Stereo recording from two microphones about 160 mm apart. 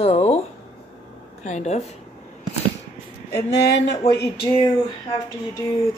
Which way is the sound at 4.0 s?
20° left (ahead or behind).